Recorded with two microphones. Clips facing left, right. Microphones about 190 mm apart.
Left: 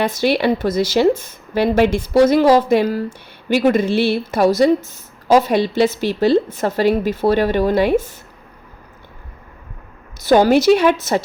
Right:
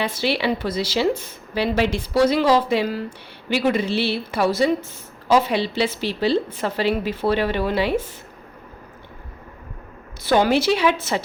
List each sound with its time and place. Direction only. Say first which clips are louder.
0.0 s a woman's voice: left 6 dB; 50° left (ahead or behind)
10.2 s a woman's voice: left 6 dB; 45° left (ahead or behind)